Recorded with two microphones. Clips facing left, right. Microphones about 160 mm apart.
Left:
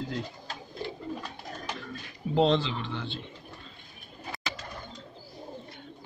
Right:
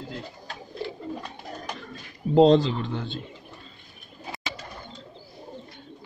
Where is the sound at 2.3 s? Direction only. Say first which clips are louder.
Right 8 dB; 40° right (ahead or behind).